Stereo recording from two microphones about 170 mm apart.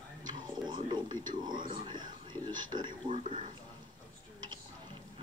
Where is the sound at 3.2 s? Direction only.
45° right (ahead or behind).